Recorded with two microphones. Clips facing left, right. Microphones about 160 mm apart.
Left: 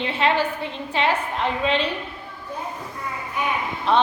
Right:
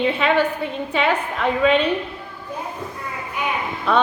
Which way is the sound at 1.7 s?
55° right (ahead or behind).